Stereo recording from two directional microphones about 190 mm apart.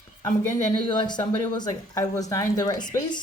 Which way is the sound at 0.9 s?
25° left (ahead or behind).